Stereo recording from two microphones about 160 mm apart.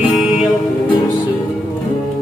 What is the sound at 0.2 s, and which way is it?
Music, centre (ahead or behind).